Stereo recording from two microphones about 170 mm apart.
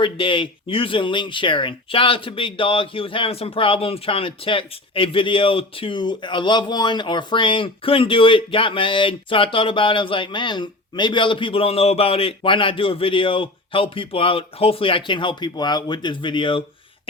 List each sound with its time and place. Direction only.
0.0 s speech: 30° left (ahead or behind)